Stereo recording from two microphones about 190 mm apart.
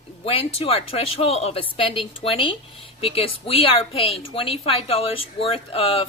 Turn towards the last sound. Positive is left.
turn(degrees=30)  # may be behind; listen again after turning